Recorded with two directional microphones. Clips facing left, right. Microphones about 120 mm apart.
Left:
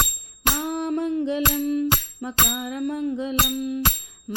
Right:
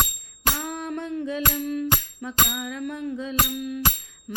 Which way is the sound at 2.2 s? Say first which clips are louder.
Left 3 dB; 25° left (ahead or behind).